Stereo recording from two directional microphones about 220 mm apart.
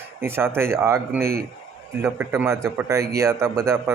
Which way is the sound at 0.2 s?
10° right (ahead or behind).